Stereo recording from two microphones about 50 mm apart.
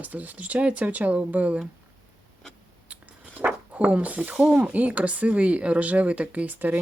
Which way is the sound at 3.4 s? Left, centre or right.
Right.